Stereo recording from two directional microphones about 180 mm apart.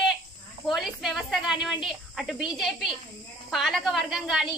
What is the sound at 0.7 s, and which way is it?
A child's voice, centre (ahead or behind).